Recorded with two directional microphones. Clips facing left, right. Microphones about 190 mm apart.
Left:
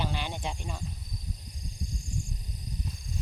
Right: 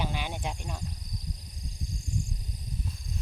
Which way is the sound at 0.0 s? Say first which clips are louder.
Even; 10° right (ahead or behind).